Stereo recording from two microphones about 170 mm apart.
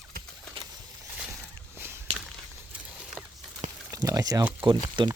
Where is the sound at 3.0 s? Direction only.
5° right (ahead or behind).